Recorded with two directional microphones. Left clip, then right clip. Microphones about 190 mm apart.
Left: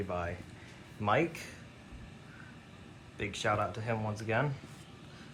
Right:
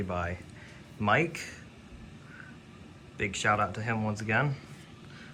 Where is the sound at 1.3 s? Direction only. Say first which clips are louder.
Right 5 dB; 10° left (ahead or behind).